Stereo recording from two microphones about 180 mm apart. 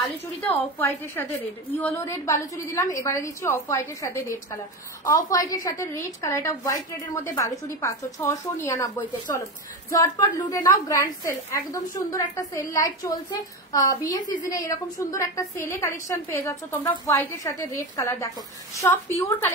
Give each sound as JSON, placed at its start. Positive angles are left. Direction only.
{"t": 0.4, "sound": "a woman's voice", "side_deg": 10}